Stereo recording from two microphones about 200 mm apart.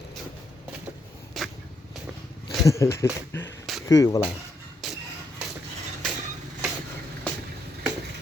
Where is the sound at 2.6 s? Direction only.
15° left (ahead or behind).